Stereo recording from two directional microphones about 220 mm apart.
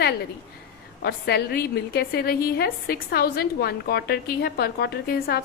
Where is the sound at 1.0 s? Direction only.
45° left (ahead or behind).